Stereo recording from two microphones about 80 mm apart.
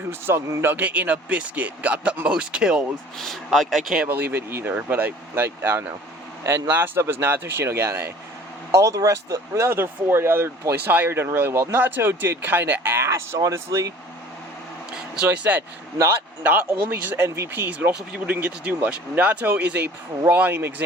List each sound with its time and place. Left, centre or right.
0.1 s speech: right; by 2.8 s centre
3.2 s speech: centre
4.0 s speech: right
5.3 s speech: right
8.8 s speech: right
9.6 s speech: right
10.8 s speech: right
15.1 s speech: centre